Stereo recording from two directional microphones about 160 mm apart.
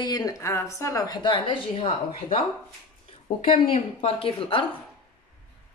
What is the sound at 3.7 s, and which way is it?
Speech, 35° left (ahead or behind).